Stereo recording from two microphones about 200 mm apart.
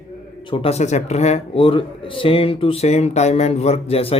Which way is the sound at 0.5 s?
30° left (ahead or behind).